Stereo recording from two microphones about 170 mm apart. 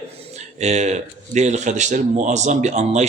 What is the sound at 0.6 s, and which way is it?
Speech, 40° right (ahead or behind).